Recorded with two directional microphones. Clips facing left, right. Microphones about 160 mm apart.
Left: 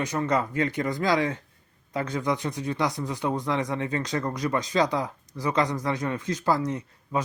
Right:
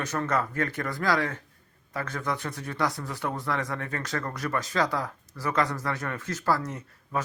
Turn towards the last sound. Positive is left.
turn(degrees=15)  # may be behind; listen again after turning